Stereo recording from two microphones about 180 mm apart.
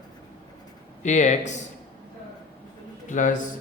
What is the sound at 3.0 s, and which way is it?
Speech, 45° left (ahead or behind).